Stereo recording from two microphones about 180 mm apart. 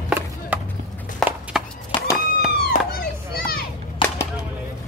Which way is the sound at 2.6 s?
55° left (ahead or behind).